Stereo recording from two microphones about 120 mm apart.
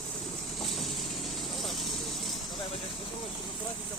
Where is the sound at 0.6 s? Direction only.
Centre (ahead or behind).